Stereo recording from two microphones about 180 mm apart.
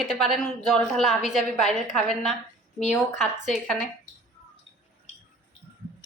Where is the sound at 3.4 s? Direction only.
Centre (ahead or behind).